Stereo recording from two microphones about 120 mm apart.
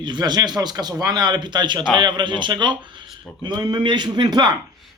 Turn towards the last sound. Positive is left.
turn(degrees=-35)  # may be behind; listen again after turning